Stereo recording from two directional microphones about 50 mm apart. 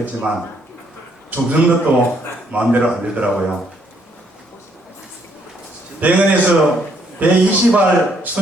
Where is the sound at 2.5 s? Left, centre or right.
Right.